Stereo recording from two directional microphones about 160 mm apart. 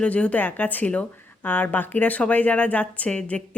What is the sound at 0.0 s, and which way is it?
Speech, 10° left (ahead or behind).